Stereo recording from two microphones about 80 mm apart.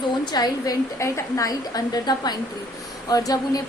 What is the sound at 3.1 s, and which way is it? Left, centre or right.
Speech, left.